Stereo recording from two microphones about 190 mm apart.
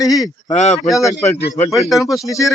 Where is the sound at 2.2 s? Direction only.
15° left (ahead or behind).